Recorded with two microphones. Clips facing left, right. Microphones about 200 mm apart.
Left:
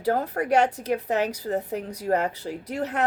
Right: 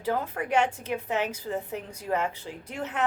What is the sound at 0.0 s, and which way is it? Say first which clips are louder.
A woman's voice: left 5 dB; 40° left (ahead or behind).